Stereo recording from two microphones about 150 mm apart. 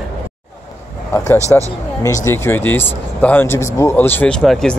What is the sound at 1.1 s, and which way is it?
Speech, 20° left (ahead or behind).